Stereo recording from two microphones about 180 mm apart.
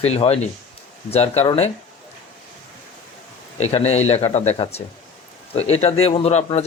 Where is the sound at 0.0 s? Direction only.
35° left (ahead or behind).